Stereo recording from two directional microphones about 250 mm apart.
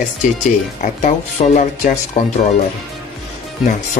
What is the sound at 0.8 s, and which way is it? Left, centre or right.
Speech, left.